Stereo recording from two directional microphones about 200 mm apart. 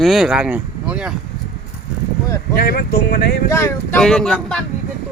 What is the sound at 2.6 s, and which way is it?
Speech, 50° left (ahead or behind).